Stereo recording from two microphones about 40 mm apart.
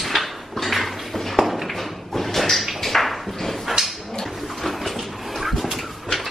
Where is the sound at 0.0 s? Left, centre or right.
Centre.